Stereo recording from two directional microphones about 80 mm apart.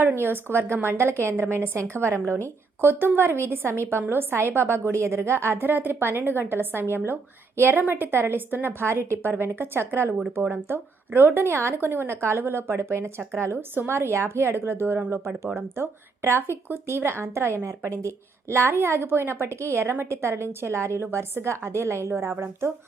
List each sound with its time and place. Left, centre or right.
0.0 s a woman's voice: right